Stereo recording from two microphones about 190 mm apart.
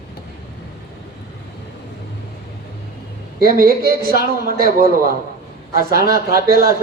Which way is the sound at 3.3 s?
50° right (ahead or behind).